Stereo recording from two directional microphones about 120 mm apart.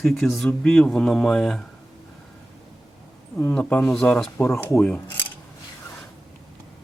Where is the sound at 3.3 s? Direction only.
15° left (ahead or behind).